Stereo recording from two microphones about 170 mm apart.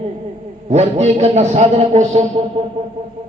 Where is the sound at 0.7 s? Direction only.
40° right (ahead or behind).